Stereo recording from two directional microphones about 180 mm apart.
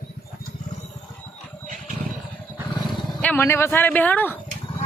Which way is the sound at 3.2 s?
10° left (ahead or behind).